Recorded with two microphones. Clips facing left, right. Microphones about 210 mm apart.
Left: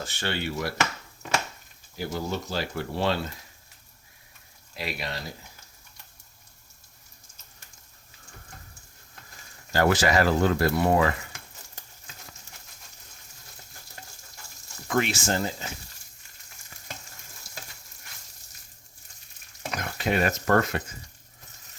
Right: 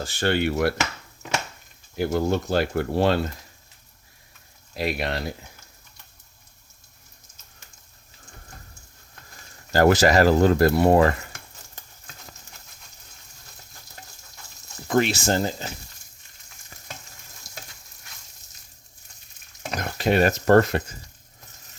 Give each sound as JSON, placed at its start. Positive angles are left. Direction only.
{"t": 0.2, "sound": "speech", "side_deg": -55}
{"t": 2.0, "sound": "speech", "side_deg": -55}
{"t": 4.7, "sound": "speech", "side_deg": -45}
{"t": 9.7, "sound": "speech", "side_deg": -40}
{"t": 14.8, "sound": "speech", "side_deg": -35}
{"t": 19.7, "sound": "speech", "side_deg": -35}